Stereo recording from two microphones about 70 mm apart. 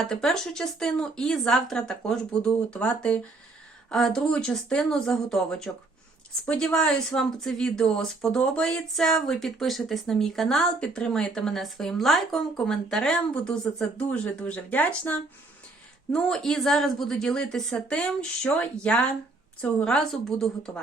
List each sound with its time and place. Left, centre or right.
0.0 s a woman's voice: centre
10.8 s a woman's voice: centre
16.1 s a woman's voice: centre